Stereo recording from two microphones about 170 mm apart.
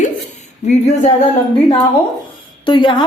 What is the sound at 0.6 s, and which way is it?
Speech, 45° left (ahead or behind).